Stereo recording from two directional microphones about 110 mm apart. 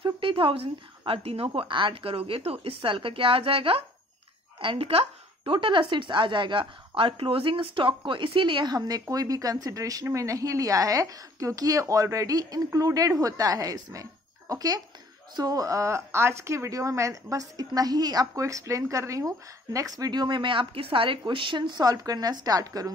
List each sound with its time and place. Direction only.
0.0 s a woman's voice: 50° right (ahead or behind); by 22.8 s 35° right (ahead or behind)